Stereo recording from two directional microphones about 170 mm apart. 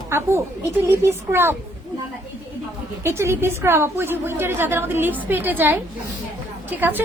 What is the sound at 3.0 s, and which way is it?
A woman's voice, 15° right (ahead or behind).